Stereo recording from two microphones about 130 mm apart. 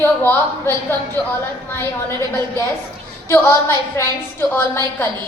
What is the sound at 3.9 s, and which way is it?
Speech, 20° left (ahead or behind).